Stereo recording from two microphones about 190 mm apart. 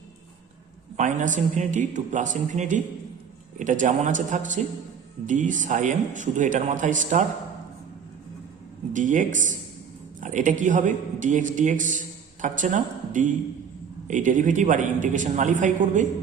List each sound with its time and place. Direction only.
0.9 s a man's voice: 40° right (ahead or behind)
8.9 s a man's voice: 40° right (ahead or behind)